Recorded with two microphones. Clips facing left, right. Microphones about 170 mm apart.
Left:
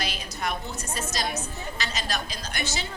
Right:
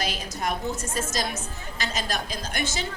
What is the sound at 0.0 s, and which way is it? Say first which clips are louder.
A woman's voice: right 2 dB; 45° right (ahead or behind).